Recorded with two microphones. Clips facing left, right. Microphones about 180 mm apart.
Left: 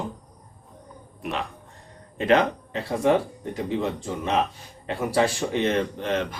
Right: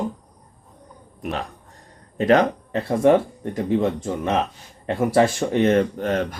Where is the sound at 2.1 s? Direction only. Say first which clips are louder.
Right 3 dB; 40° right (ahead or behind).